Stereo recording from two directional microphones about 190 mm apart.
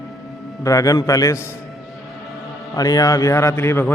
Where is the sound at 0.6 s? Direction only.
15° left (ahead or behind).